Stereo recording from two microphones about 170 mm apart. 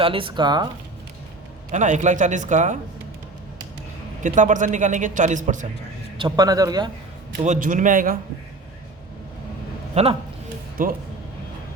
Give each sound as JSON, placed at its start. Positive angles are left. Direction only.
{"t": 0.0, "sound": "a man's voice", "side_deg": -30}
{"t": 1.7, "sound": "a man's voice", "side_deg": -45}
{"t": 4.2, "sound": "a man's voice", "side_deg": -50}
{"t": 6.1, "sound": "a man's voice", "side_deg": -20}
{"t": 7.4, "sound": "a man's voice", "side_deg": -50}
{"t": 9.9, "sound": "a man's voice", "side_deg": -35}
{"t": 10.8, "sound": "speech", "side_deg": -55}